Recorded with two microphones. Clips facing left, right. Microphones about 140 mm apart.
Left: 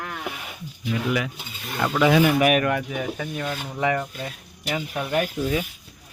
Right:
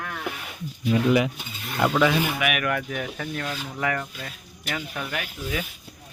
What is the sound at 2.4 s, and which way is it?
Speech, 35° left (ahead or behind).